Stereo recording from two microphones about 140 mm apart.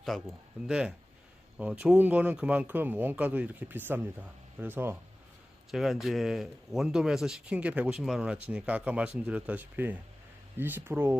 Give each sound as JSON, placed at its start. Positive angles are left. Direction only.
{"t": 0.0, "sound": "speech", "side_deg": 0}
{"t": 5.7, "sound": "speech", "side_deg": 0}